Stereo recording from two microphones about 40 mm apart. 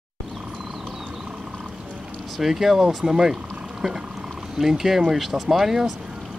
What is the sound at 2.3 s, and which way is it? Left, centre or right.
Speech, centre.